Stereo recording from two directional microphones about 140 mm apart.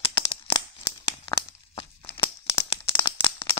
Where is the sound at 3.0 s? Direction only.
35° left (ahead or behind).